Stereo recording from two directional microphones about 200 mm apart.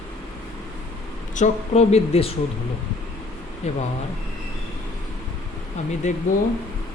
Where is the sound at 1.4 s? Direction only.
35° left (ahead or behind).